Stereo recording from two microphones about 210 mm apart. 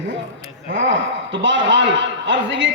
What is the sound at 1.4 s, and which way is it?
A man's voice, 60° right (ahead or behind).